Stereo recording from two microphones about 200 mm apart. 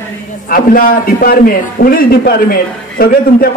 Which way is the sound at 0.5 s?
45° left (ahead or behind).